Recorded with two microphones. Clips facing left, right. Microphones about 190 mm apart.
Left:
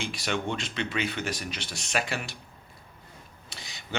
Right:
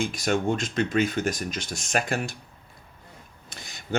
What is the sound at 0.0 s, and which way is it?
Speech, 45° right (ahead or behind).